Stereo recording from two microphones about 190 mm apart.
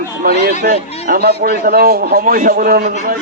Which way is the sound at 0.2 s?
55° right (ahead or behind).